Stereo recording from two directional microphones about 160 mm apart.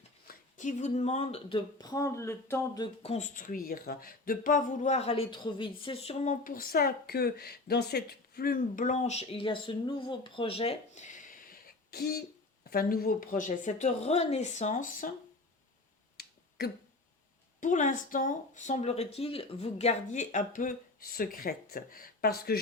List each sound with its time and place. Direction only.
0.3 s speech: 50° left (ahead or behind); by 2.9 s 20° left (ahead or behind)
3.0 s speech: 45° left (ahead or behind)
6.4 s a woman's voice: 60° left (ahead or behind); by 12.2 s 80° left
12.7 s speech: 65° left (ahead or behind)
16.1 s finger snapping: 80° left
17.6 s speech: 50° left (ahead or behind); by 22.6 s 75° left (ahead or behind)